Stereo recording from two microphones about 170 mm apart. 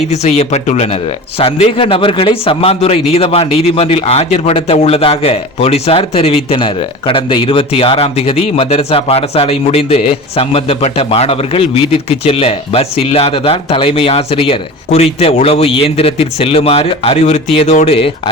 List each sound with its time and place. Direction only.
0.1 s a man's voice: 40° left (ahead or behind)